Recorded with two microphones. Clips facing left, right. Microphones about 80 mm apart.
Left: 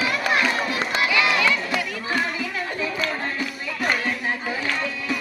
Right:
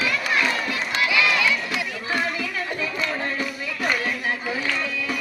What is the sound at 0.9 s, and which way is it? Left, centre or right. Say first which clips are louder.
Run: even; left.